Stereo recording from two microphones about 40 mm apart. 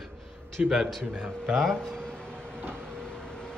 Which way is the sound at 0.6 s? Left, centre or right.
Right.